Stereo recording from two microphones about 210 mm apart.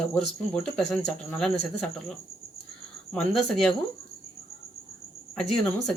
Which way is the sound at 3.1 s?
5° left (ahead or behind).